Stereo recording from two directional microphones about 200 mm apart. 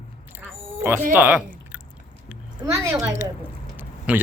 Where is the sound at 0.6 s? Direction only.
10° right (ahead or behind).